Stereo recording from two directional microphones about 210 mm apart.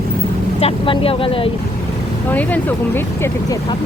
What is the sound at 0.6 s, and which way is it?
Speech, 25° left (ahead or behind).